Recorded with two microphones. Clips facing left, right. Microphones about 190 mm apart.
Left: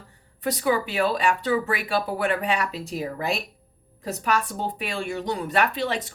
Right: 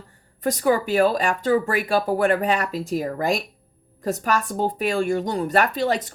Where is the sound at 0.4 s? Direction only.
45° right (ahead or behind).